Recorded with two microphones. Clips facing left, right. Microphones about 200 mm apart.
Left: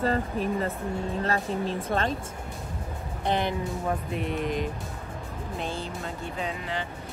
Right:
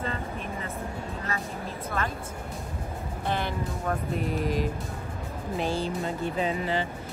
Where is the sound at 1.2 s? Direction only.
30° left (ahead or behind).